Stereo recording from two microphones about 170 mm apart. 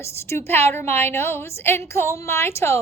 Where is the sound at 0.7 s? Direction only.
15° left (ahead or behind).